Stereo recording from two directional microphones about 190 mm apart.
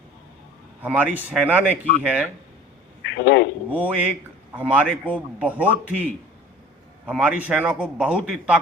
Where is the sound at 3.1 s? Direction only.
65° left (ahead or behind).